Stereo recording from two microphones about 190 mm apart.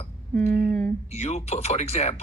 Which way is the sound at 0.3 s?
5° left (ahead or behind).